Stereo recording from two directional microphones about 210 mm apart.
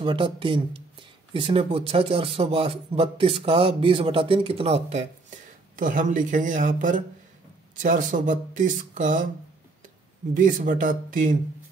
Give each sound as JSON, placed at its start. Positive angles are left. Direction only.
{"t": 0.0, "sound": "speech", "side_deg": -25}
{"t": 10.3, "sound": "speech", "side_deg": -40}